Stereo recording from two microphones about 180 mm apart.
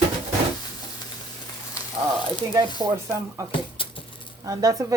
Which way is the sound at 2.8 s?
15° right (ahead or behind).